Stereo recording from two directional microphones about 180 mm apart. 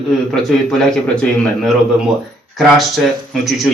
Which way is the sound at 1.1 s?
5° left (ahead or behind).